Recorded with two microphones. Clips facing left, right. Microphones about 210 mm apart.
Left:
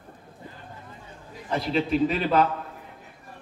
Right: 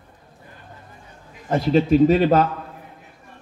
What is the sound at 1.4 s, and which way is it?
Speech, 45° right (ahead or behind).